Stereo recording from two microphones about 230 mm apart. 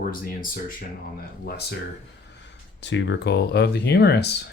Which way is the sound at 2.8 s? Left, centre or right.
Left.